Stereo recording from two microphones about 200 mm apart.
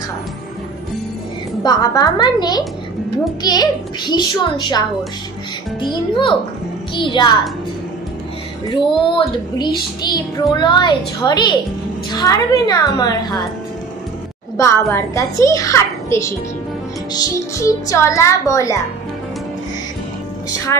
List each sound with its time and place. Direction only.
1.6 s speech: 20° left (ahead or behind)
8.6 s speech: 20° left (ahead or behind)
14.6 s a child's voice: 15° left (ahead or behind)